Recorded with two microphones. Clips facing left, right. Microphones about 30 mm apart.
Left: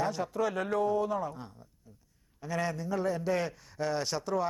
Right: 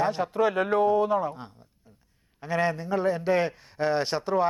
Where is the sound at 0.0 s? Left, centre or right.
Right.